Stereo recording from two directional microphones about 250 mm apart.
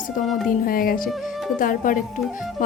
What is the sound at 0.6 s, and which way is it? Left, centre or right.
A woman's voice, left.